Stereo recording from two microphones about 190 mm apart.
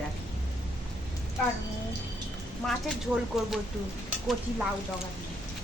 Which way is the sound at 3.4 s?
Centre (ahead or behind).